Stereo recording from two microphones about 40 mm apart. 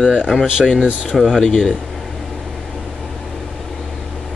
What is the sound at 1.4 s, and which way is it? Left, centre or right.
Speech, centre.